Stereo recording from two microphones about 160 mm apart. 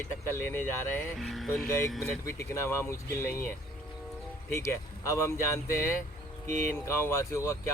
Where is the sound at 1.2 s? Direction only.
Centre (ahead or behind).